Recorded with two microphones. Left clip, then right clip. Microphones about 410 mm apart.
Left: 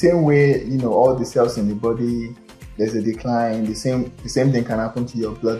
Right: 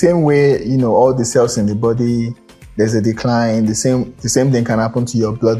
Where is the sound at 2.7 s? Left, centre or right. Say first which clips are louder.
Right 6 dB; right.